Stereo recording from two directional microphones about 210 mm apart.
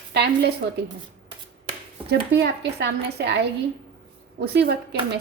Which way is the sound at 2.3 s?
50° right (ahead or behind).